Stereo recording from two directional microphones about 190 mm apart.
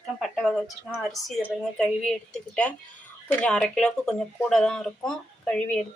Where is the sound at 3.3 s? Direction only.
5° left (ahead or behind).